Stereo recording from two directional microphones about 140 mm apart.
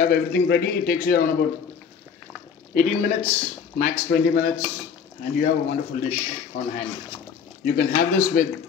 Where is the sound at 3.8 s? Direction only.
90° left.